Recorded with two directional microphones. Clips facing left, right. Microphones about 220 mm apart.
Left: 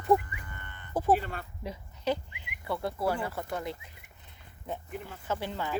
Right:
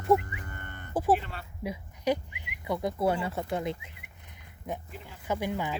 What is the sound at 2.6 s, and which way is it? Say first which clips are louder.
Speech: right 3 dB; 15° right (ahead or behind).